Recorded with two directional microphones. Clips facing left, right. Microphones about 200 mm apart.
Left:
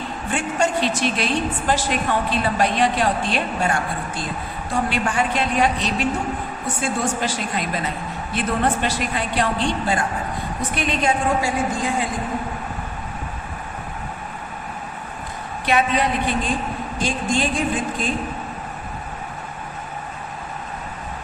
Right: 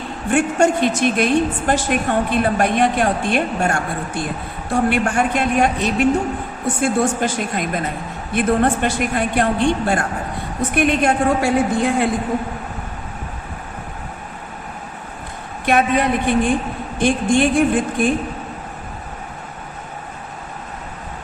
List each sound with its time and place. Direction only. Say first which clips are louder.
0.3 s a woman's voice: right 7 dB; 50° right (ahead or behind)
15.6 s a woman's voice: right 3 dB; 50° right (ahead or behind)